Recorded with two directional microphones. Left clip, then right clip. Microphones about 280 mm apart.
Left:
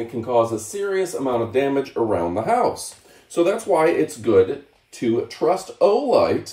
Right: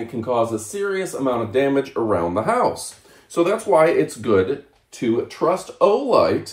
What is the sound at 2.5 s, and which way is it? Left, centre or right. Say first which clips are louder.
Speech: left 2 dB; centre.